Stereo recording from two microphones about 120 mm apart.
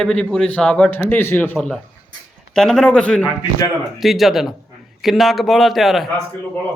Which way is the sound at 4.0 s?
Centre (ahead or behind).